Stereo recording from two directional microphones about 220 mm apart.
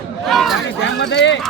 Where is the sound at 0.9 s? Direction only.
55° left (ahead or behind).